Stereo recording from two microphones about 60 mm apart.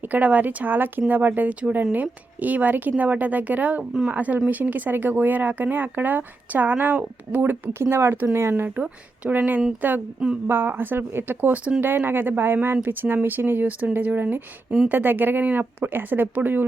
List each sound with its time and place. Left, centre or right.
0.1 s a woman's voice: right
7.7 s speech: right
8.7 s a woman's voice: right